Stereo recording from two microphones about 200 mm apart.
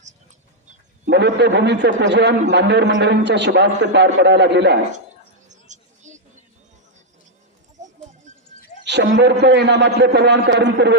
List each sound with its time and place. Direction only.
1.1 s a man's voice: 60° right (ahead or behind)
5.5 s a sound: 35° right (ahead or behind)
8.8 s a man's voice: 60° right (ahead or behind)